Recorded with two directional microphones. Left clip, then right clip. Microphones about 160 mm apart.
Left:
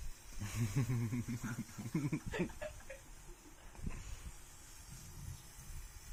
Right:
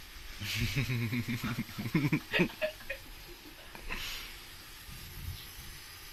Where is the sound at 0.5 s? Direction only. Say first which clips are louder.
Right 8 dB; 5° left (ahead or behind).